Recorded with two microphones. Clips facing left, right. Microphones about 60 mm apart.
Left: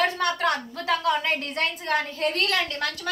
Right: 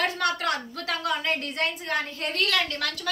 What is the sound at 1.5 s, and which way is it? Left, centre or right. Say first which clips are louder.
Speech: left 2 dB; left.